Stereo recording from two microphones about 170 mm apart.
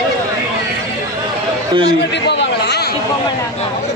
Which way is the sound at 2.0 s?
90° left.